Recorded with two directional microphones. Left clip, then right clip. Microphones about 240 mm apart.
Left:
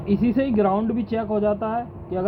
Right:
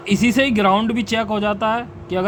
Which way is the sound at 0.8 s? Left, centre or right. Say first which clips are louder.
Right 5 dB; right.